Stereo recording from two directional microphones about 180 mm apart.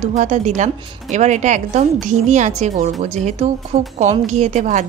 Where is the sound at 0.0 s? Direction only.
40° right (ahead or behind).